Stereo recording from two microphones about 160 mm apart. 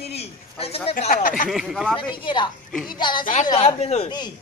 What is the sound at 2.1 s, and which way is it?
A man's voice, 30° left (ahead or behind).